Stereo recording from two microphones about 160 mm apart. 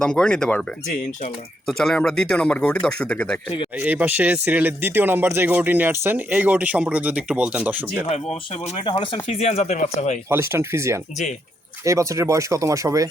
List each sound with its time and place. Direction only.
0.0 s a man's voice: 5° left (ahead or behind)
1.6 s a man's voice: 5° left (ahead or behind)
3.8 s speech: 10° right (ahead or behind)
8.1 s speech: 40° left (ahead or behind)
10.2 s speech: 15° right (ahead or behind)